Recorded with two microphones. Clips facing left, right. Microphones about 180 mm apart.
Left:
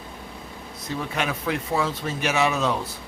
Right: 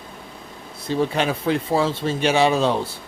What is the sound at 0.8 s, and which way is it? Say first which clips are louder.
Speech: right 7 dB; 30° right (ahead or behind).